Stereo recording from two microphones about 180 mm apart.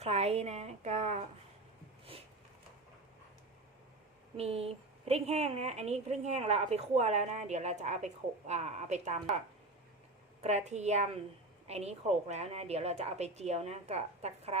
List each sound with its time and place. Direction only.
0.0 s a woman's voice: 35° right (ahead or behind)
4.4 s a woman's voice: 35° right (ahead or behind)
10.4 s a woman's voice: 40° right (ahead or behind)